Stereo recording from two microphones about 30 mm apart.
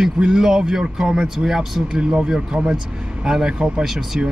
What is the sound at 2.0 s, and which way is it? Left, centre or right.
Speech, right.